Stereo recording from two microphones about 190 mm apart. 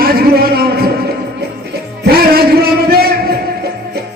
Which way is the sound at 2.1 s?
55° right (ahead or behind).